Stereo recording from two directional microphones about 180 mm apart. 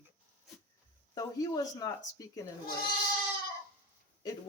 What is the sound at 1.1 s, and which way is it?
Speech, 20° left (ahead or behind).